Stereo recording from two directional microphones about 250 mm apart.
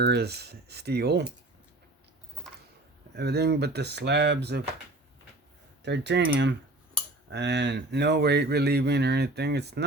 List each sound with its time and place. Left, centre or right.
0.0 s speech: right
3.2 s speech: right
5.8 s speech: right